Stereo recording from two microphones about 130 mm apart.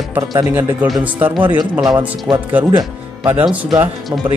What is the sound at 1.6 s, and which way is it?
Speech, 35° right (ahead or behind).